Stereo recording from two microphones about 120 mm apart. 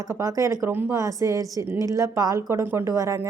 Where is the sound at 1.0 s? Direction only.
25° right (ahead or behind).